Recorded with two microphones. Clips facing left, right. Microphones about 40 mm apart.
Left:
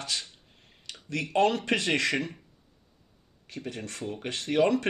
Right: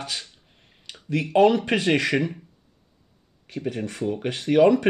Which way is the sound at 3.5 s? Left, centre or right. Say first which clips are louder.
Right 8 dB; centre.